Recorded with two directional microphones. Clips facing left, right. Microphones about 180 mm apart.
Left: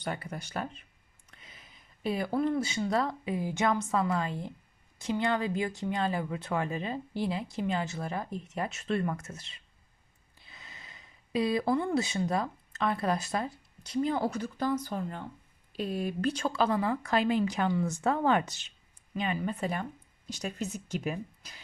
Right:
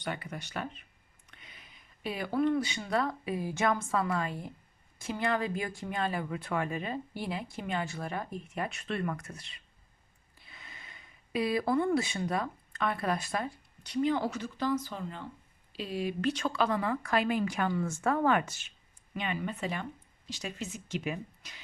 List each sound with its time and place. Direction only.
0.0 s speech: 35° left (ahead or behind)
1.3 s a sound: 30° left (ahead or behind)
2.0 s speech: 30° left (ahead or behind)
14.4 s speech: 55° left (ahead or behind)
16.4 s speech: 30° left (ahead or behind)
19.1 s speech: 35° left (ahead or behind)